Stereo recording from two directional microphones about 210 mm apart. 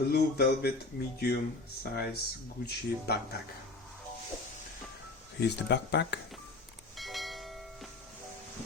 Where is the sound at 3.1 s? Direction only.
50° left (ahead or behind).